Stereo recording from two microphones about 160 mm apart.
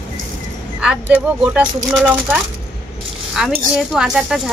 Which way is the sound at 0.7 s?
10° right (ahead or behind).